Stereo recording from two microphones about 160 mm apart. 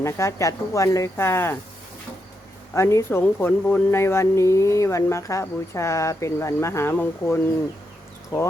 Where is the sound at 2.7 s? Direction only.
15° left (ahead or behind).